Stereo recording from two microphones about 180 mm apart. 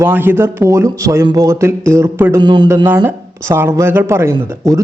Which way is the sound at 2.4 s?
25° right (ahead or behind).